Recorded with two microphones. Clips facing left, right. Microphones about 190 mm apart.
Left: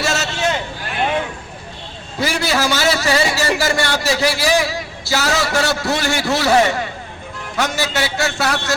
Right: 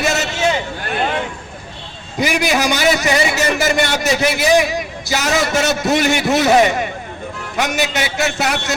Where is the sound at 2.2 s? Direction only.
15° right (ahead or behind).